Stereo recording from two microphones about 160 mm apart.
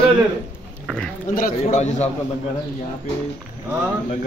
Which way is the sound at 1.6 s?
45° left (ahead or behind).